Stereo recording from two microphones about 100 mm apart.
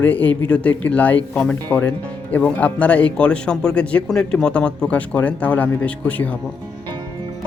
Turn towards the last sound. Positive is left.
turn(degrees=15)  # may be behind; listen again after turning